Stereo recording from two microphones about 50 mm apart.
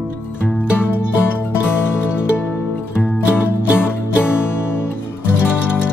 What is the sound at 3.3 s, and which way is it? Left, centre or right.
Music, left.